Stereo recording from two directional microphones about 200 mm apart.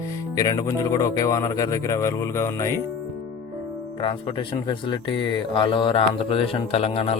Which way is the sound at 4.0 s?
25° left (ahead or behind).